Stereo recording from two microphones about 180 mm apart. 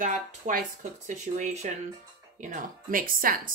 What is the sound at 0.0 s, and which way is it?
A woman's voice, 45° right (ahead or behind).